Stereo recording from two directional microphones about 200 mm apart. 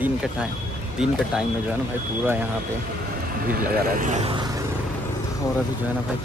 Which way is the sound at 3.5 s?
45° right (ahead or behind).